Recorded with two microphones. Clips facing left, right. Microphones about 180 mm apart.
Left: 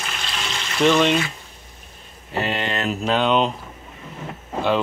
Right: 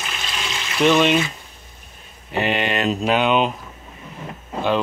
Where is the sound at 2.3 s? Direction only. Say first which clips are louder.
Right 3 dB; 20° right (ahead or behind).